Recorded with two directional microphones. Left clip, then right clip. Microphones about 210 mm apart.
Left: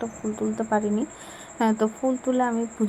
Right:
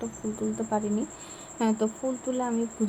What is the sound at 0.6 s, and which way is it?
A woman's voice, 10° left (ahead or behind).